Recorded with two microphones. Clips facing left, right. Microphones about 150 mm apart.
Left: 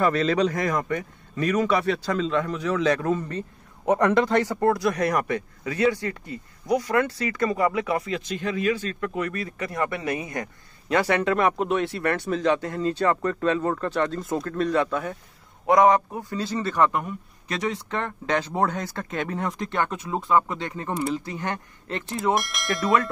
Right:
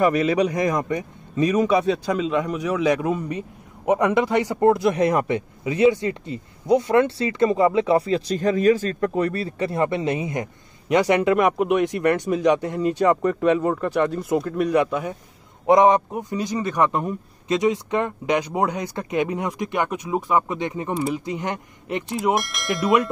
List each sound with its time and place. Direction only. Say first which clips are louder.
0.0 s a man's voice: right 3 dB; 15° right (ahead or behind)
22.3 s speech: right 1 dB; centre (ahead or behind)